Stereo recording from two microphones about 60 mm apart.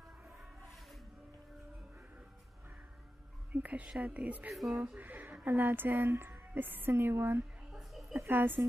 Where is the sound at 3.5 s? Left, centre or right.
Right.